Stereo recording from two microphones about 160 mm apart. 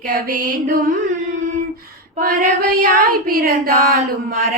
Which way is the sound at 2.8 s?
65° right (ahead or behind).